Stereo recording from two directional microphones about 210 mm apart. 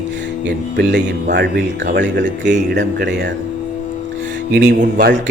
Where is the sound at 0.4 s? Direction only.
55° right (ahead or behind).